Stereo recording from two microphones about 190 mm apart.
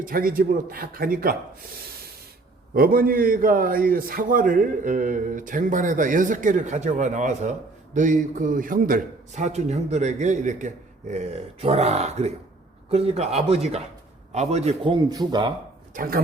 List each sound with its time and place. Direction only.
0.0 s a man's voice: 50° right (ahead or behind)
2.7 s a man's voice: 50° right (ahead or behind); by 15.5 s 25° right (ahead or behind)
16.0 s a man's voice: 50° right (ahead or behind)